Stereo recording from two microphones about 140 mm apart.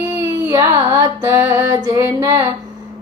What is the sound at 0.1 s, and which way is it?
Child singing, 20° right (ahead or behind).